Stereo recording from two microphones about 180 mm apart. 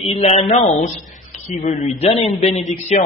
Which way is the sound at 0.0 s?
35° left (ahead or behind).